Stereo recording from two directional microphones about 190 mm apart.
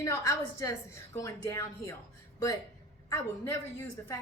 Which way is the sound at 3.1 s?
15° left (ahead or behind).